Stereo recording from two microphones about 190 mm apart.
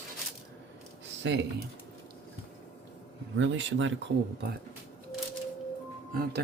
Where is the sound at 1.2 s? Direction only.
70° right (ahead or behind).